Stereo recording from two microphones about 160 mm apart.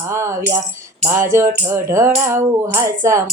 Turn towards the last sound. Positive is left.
turn(degrees=-20)  # may be behind; listen again after turning